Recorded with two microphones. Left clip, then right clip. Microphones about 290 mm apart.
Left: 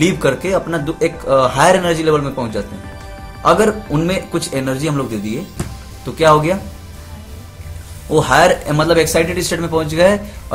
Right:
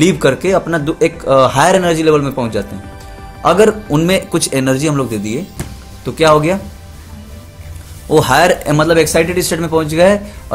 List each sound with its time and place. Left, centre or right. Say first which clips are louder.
0.0 s speech: right 4 dB; right
8.1 s speech: right 1 dB; right